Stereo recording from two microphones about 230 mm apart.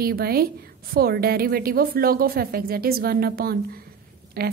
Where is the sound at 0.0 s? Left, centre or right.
Right.